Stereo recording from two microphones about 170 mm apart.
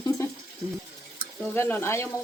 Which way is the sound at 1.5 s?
15° left (ahead or behind).